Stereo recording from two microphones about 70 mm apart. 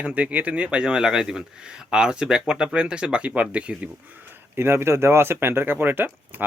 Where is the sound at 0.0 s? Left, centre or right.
Centre.